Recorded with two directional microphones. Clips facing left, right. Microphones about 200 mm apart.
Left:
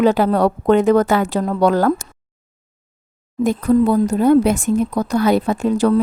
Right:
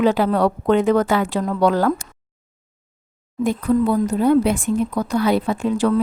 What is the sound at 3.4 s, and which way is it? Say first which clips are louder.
A woman's voice: left 3 dB; 45° left (ahead or behind).